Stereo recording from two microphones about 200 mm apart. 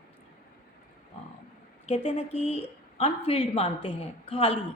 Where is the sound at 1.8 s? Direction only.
30° left (ahead or behind).